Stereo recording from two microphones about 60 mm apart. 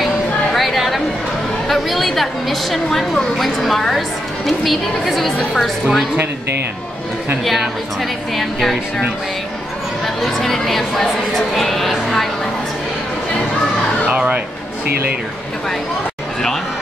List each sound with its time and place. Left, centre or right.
0.5 s chatter: centre
1.7 s a woman's voice: centre
8.0 s a woman's voice: centre
10.0 s speech: centre
14.0 s speech: right